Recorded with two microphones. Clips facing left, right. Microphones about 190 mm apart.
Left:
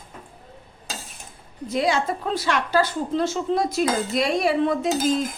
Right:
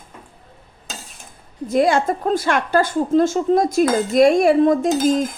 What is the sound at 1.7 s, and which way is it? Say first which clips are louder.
A woman's voice: right 6 dB; 50° right (ahead or behind).